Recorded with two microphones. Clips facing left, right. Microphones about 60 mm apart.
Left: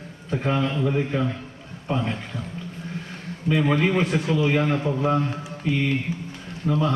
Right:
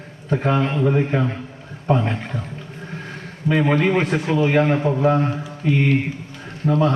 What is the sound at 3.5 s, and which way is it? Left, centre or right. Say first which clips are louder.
A man's voice: right 3 dB; right.